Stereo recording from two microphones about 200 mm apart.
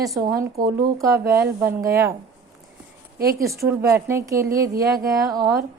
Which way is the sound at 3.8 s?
10° right (ahead or behind).